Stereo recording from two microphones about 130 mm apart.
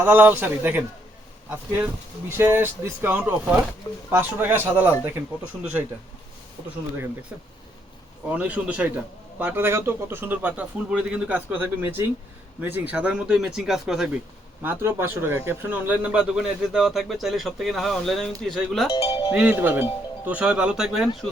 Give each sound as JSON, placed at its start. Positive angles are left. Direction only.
{"t": 0.0, "sound": "speech", "side_deg": -15}
{"t": 2.3, "sound": "speech", "side_deg": -15}
{"t": 8.3, "sound": "speech", "side_deg": -10}
{"t": 14.6, "sound": "speech", "side_deg": -15}
{"t": 18.9, "sound": "music", "side_deg": 25}
{"t": 19.3, "sound": "speech", "side_deg": -10}